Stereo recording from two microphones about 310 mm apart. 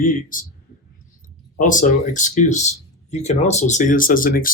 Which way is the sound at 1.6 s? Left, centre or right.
Left.